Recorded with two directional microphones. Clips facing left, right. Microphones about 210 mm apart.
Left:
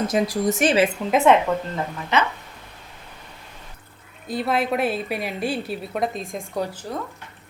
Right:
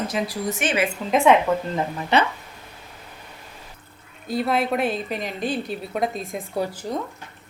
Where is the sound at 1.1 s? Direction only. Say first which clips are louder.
Right 1 dB; centre (ahead or behind).